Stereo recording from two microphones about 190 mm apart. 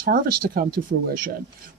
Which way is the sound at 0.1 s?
50° right (ahead or behind).